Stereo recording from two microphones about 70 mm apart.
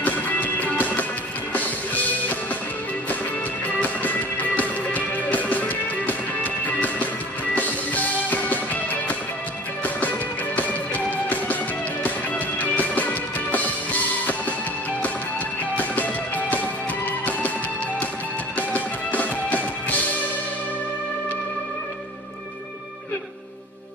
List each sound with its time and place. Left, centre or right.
0.0 s music: left
3.6 s music: left
9.8 s music: left
12.5 s music: left
15.7 s music: left
18.6 s music: left